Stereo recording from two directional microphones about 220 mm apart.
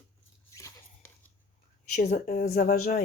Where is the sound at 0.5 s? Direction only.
15° left (ahead or behind).